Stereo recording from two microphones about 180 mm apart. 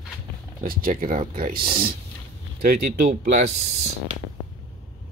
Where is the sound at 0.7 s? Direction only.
55° right (ahead or behind).